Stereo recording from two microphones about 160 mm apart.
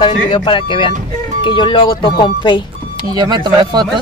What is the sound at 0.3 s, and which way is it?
Speech, 30° left (ahead or behind).